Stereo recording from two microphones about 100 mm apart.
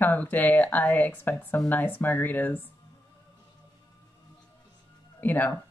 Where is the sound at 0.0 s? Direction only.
15° left (ahead or behind).